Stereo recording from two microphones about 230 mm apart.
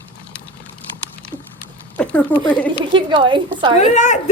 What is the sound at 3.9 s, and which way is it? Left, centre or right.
Speech, left.